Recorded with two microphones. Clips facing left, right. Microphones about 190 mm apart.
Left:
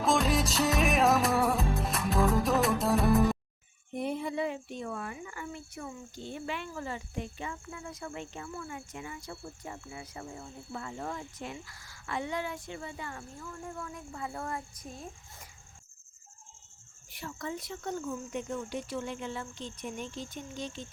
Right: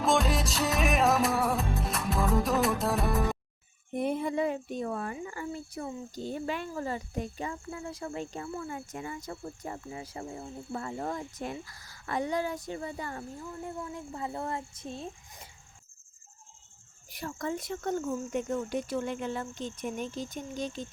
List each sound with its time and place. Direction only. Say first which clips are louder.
0.0 s music: even; centre (ahead or behind)
3.9 s speech: right 3 dB; 50° right (ahead or behind); by 10.5 s 25° right (ahead or behind)
10.7 s speech: right 4 dB; 40° right (ahead or behind)
13.4 s speech: right 1 dB; 25° right (ahead or behind)
17.1 s speech: right 4 dB; 40° right (ahead or behind)